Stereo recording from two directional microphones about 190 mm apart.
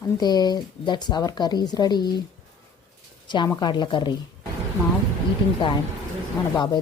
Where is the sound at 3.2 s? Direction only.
20° left (ahead or behind).